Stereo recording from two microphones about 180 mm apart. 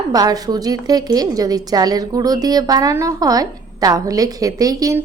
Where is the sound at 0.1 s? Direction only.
20° right (ahead or behind).